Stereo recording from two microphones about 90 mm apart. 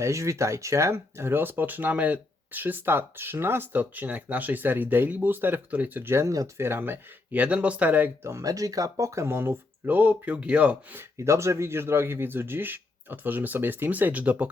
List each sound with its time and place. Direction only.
0.0 s speech: 35° right (ahead or behind)
6.6 s speech: 25° right (ahead or behind)
11.2 s speech: 30° right (ahead or behind); by 14.5 s 15° right (ahead or behind)